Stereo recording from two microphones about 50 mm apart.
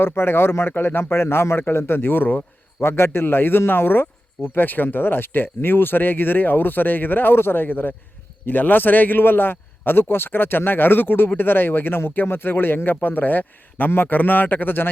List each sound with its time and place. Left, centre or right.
0.0 s a man's voice: left
2.8 s a man's voice: left